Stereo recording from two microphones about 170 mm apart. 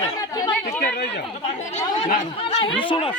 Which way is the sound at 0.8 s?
65° left (ahead or behind).